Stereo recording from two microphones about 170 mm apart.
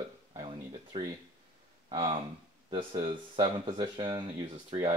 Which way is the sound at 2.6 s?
35° right (ahead or behind).